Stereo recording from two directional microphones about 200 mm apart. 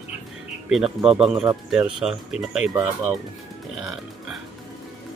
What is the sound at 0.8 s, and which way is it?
Speech, 30° right (ahead or behind).